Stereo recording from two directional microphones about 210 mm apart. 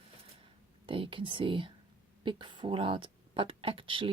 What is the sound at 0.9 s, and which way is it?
Speech, 25° right (ahead or behind).